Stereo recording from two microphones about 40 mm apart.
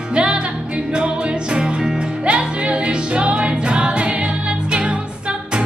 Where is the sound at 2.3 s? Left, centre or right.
Right.